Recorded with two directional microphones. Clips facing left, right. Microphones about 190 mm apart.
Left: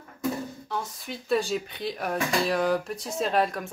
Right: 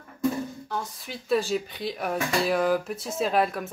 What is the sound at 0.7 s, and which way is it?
Speech, centre (ahead or behind).